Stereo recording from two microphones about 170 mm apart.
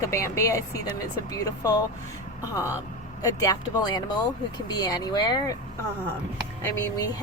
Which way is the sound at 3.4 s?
25° left (ahead or behind).